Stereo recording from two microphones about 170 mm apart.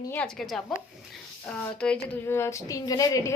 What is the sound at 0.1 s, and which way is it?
Speech, 5° left (ahead or behind).